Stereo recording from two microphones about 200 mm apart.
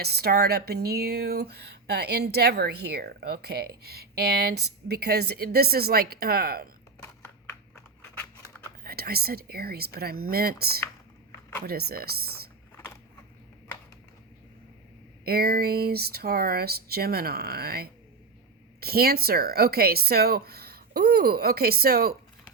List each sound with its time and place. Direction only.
0.0 s speech: 55° right (ahead or behind)
8.8 s speech: 50° right (ahead or behind)
15.2 s speech: 50° right (ahead or behind)